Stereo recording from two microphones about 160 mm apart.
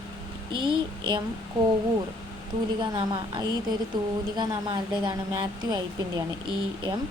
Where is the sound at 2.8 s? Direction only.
35° right (ahead or behind).